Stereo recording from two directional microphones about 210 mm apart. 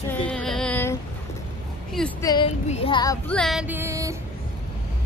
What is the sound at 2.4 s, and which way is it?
Music, 30° left (ahead or behind).